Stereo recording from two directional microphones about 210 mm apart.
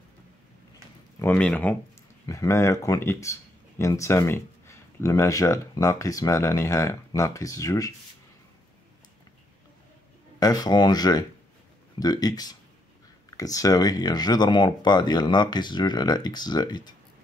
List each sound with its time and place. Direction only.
1.2 s speech: 5° left (ahead or behind)
10.4 s speech: 20° left (ahead or behind)